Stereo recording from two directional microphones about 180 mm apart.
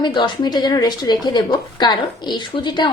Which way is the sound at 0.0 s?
25° left (ahead or behind).